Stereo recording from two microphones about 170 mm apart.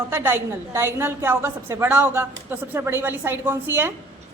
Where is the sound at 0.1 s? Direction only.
15° right (ahead or behind).